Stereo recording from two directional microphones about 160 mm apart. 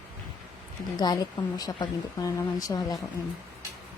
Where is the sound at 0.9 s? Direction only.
25° left (ahead or behind).